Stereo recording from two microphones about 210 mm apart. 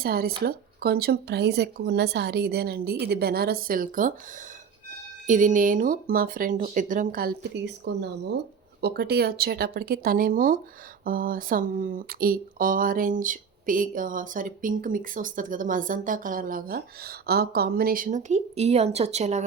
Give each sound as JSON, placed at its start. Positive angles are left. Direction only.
{"t": 0.0, "sound": "speech", "side_deg": -45}
{"t": 5.2, "sound": "speech", "side_deg": -40}